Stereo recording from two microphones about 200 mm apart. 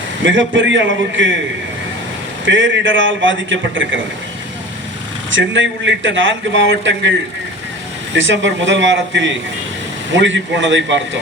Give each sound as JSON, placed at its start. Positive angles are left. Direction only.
{"t": 0.3, "sound": "a man's voice", "side_deg": -70}
{"t": 2.4, "sound": "a man's voice", "side_deg": -70}
{"t": 5.3, "sound": "a man's voice", "side_deg": -70}
{"t": 8.1, "sound": "a man's voice", "side_deg": -65}